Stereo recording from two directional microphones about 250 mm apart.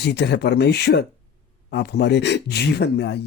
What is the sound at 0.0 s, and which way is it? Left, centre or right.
Speech, left.